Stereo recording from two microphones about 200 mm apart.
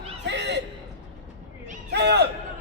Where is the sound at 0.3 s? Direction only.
60° right (ahead or behind).